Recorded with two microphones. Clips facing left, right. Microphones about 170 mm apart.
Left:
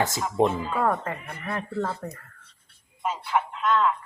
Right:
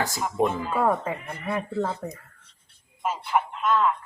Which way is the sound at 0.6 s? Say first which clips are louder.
Right 1 dB; 10° right (ahead or behind).